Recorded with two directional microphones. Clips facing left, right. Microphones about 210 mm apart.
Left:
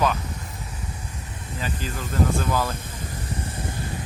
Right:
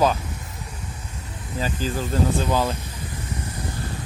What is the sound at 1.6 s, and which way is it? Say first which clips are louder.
Speech: right 6 dB; 35° right (ahead or behind).